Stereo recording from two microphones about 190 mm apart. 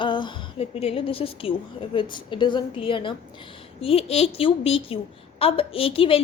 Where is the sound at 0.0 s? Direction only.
25° left (ahead or behind).